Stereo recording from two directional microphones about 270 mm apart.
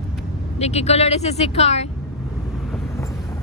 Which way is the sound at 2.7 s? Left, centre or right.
Centre.